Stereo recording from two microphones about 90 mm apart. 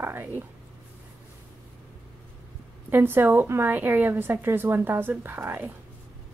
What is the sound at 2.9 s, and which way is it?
A woman's voice, 25° right (ahead or behind).